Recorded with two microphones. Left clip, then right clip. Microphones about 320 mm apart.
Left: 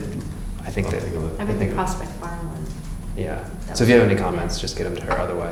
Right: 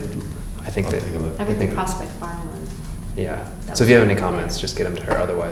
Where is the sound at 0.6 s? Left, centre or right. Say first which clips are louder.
Right 2 dB; centre.